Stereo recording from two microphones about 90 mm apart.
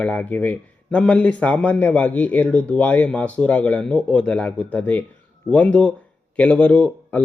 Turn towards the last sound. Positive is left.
turn(degrees=10)  # may be behind; listen again after turning